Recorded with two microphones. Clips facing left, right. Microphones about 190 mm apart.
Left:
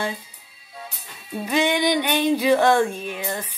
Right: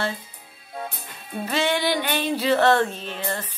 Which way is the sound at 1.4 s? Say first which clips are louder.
Left 3 dB; 15° left (ahead or behind).